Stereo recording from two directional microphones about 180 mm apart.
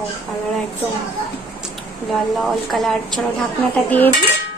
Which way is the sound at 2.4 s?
Centre (ahead or behind).